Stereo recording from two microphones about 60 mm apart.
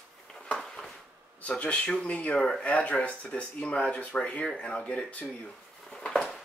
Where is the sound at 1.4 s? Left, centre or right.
Left.